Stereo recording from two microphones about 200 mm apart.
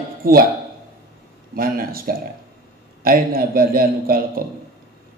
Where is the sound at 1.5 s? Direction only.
45° right (ahead or behind).